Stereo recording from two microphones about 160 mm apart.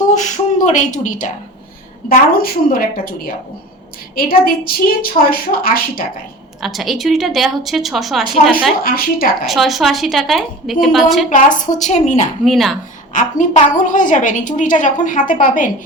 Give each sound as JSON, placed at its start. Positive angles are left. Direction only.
{"t": 0.1, "sound": "speech", "side_deg": 50}
{"t": 2.0, "sound": "a woman's voice", "side_deg": 65}
{"t": 6.6, "sound": "a woman's voice", "side_deg": 0}
{"t": 8.8, "sound": "a woman's voice", "side_deg": 65}
{"t": 9.5, "sound": "a woman's voice", "side_deg": 0}
{"t": 11.8, "sound": "a woman's voice", "side_deg": 50}
{"t": 12.5, "sound": "a woman's voice", "side_deg": 0}
{"t": 13.1, "sound": "a woman's voice", "side_deg": 55}